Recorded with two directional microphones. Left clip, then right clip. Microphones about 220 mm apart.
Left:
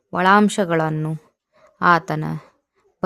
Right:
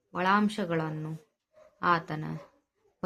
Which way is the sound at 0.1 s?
50° left (ahead or behind).